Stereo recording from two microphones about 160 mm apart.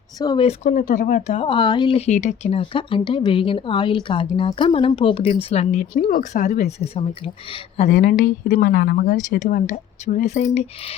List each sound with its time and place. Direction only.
0.2 s speech: 25° left (ahead or behind)
0.4 s a woman's voice: 50° left (ahead or behind)
1.3 s speech: 30° left (ahead or behind)
6.0 s a woman's voice: 60° left (ahead or behind); by 7.9 s 35° left (ahead or behind)
7.9 s a woman's voice: 60° left (ahead or behind)